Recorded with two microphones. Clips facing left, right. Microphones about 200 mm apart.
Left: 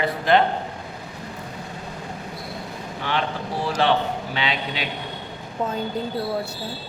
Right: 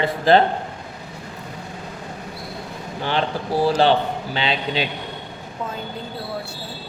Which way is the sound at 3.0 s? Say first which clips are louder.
Right 3 dB; 30° right (ahead or behind).